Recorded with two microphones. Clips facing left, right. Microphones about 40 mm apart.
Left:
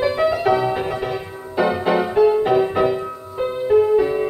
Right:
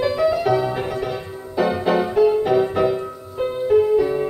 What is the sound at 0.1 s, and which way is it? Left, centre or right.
Music, left.